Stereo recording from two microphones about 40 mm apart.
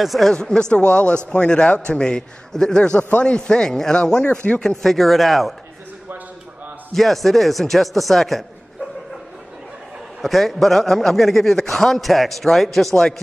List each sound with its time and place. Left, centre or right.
0.0 s a man's voice: centre
0.3 s a man's voice: centre
3.0 s a man's voice: left; by 4.9 s centre
4.9 s a man's voice: centre
6.9 s a man's voice: centre
10.2 s a man's voice: centre